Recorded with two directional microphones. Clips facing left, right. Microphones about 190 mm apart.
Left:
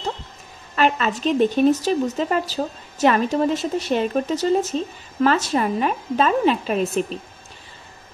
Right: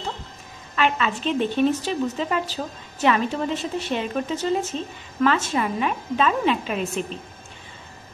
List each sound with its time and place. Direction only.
0.7 s a woman's voice: 40° left (ahead or behind)